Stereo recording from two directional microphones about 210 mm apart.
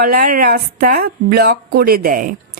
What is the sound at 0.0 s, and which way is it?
Speech, 45° right (ahead or behind).